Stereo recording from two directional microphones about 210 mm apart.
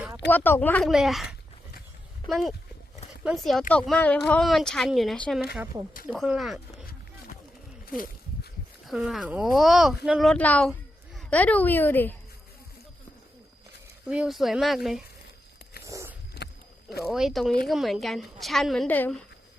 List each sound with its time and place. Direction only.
0.3 s speech: 10° left (ahead or behind)
8.9 s speech: centre (ahead or behind)
14.1 s speech: centre (ahead or behind)
15.9 s dog: 15° right (ahead or behind)
16.4 s wild animals: 55° left (ahead or behind)
17.1 s speech: centre (ahead or behind)